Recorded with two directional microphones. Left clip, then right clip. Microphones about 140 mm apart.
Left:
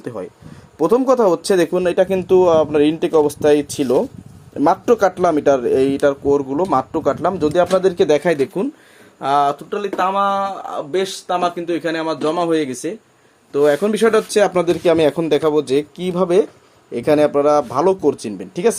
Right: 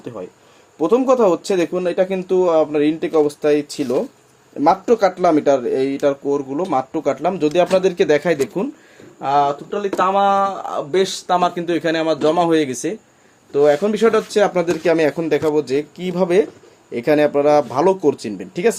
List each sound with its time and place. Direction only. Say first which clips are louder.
0.8 s speech: even; 55° left (ahead or behind)
7.3 s speech: right 2 dB; 15° left (ahead or behind)
9.2 s speech: left 1 dB; 40° left (ahead or behind)
10.1 s speech: right 3 dB; 5° right (ahead or behind)
10.4 s speech: right 2 dB; 20° right (ahead or behind)
13.5 s speech: even; 25° left (ahead or behind); by 16.1 s 40° left (ahead or behind)
16.1 s speech: even; 20° left (ahead or behind)